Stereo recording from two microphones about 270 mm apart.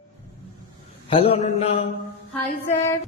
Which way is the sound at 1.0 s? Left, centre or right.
Centre.